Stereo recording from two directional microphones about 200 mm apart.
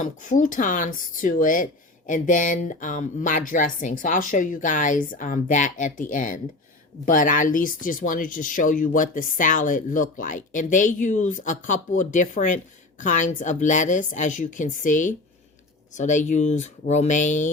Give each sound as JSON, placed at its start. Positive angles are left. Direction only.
{"t": 0.0, "sound": "speech", "side_deg": 40}